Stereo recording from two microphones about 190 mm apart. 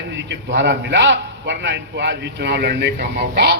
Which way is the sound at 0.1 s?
70° right (ahead or behind).